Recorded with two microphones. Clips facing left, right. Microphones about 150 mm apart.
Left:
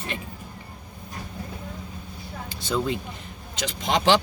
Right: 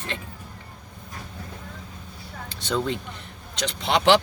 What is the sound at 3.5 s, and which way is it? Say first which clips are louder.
Speech: right 1 dB; 75° right (ahead or behind).